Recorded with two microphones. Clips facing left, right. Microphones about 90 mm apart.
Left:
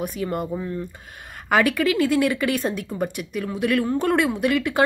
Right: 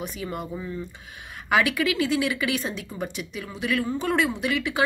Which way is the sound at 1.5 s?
45° left (ahead or behind).